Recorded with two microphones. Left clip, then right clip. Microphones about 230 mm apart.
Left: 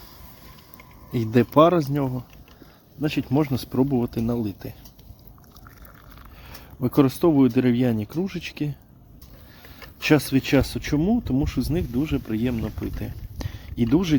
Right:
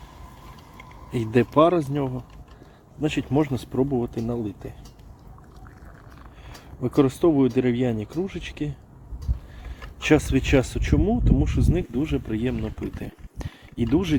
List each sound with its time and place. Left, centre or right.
1.1 s speech: left
6.8 s speech: left
9.8 s speech: left
13.0 s a sound: left